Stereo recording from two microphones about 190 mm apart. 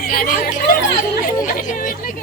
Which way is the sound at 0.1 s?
50° left (ahead or behind).